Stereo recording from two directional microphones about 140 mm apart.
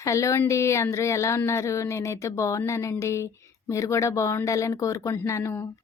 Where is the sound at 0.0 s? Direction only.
20° left (ahead or behind).